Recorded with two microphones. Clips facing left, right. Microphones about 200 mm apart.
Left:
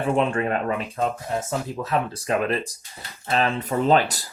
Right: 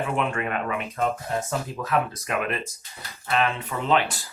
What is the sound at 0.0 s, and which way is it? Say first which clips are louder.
Speech: left 5 dB; 30° left (ahead or behind).